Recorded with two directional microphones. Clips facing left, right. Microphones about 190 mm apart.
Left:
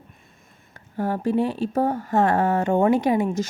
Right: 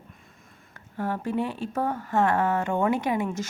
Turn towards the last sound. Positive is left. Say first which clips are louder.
# left 6 dB
turn(degrees=35)  # may be behind; listen again after turning